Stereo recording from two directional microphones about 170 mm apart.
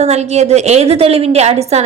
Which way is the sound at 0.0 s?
40° right (ahead or behind).